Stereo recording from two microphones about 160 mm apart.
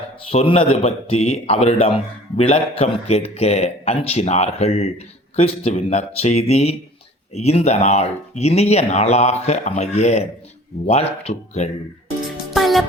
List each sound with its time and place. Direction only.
0.3 s speech: 35° left (ahead or behind)
12.5 s music: centre (ahead or behind)